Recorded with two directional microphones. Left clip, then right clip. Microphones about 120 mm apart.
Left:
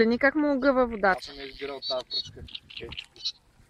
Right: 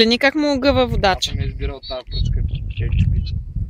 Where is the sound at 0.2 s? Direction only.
35° right (ahead or behind).